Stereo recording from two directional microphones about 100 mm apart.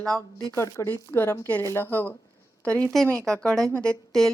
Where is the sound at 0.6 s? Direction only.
25° left (ahead or behind).